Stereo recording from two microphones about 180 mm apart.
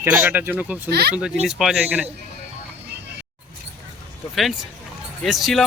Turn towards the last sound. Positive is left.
turn(degrees=0)  # may be behind; listen again after turning